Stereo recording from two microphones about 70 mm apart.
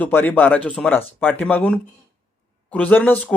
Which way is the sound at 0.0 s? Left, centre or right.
Left.